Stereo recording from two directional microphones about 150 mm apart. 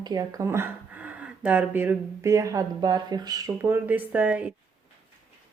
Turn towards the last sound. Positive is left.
turn(degrees=-10)  # may be behind; listen again after turning